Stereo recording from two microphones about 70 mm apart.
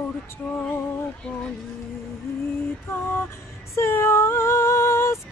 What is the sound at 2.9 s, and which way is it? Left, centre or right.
Music, left.